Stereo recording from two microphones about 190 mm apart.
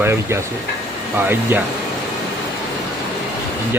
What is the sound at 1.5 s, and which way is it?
Speech, 10° right (ahead or behind).